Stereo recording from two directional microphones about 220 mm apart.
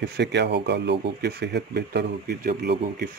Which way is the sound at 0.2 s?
50° right (ahead or behind).